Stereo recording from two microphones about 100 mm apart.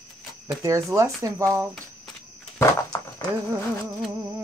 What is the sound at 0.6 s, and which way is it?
Speech, 30° right (ahead or behind).